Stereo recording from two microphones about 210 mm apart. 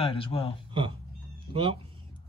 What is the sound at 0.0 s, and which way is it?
Speech, 25° left (ahead or behind).